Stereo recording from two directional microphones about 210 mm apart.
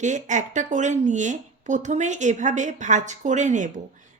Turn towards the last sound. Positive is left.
turn(degrees=-35)  # may be behind; listen again after turning